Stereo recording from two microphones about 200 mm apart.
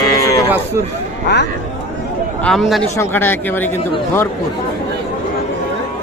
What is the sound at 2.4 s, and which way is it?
Speech, centre (ahead or behind).